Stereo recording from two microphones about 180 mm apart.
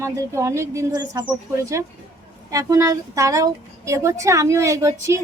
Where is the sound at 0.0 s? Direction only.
15° right (ahead or behind).